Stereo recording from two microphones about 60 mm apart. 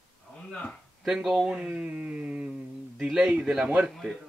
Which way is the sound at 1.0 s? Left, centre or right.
Centre.